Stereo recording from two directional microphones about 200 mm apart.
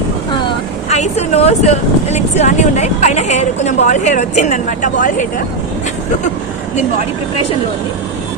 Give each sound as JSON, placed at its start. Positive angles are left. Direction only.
{"t": 0.9, "sound": "speech", "side_deg": 35}